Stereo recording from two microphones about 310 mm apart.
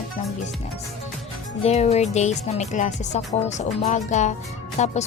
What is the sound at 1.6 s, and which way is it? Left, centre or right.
Music, left.